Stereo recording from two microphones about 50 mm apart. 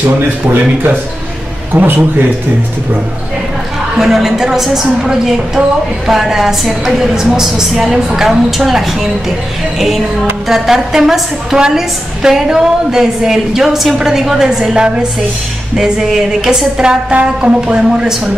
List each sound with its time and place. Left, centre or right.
0.0 s a man's voice: right
4.0 s a woman's voice: centre
6.0 s a woman's voice: centre